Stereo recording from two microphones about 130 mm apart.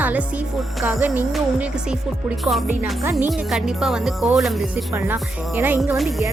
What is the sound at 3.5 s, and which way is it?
Speech, 5° right (ahead or behind).